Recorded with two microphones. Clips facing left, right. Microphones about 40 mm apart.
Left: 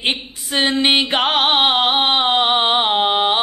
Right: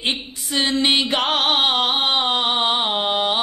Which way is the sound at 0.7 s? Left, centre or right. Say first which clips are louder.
Left 2 dB; left.